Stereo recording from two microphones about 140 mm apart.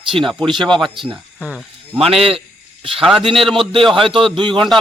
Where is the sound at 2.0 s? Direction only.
45° right (ahead or behind).